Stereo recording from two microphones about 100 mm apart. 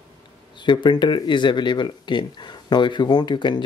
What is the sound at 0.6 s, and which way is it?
Speech, 50° left (ahead or behind).